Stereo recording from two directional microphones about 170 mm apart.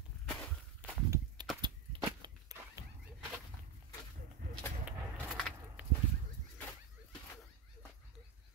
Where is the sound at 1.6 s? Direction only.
25° right (ahead or behind).